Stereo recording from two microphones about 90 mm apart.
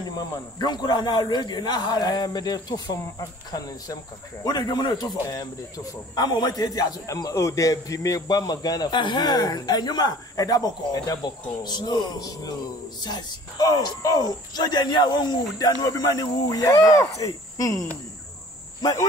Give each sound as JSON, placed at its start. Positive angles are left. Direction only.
{"t": 0.1, "sound": "a man's voice", "side_deg": 50}